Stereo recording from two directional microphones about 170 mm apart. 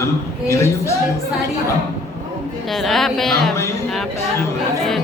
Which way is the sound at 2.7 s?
Centre (ahead or behind).